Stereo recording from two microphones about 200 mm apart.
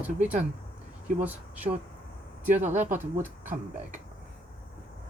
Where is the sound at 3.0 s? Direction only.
10° right (ahead or behind).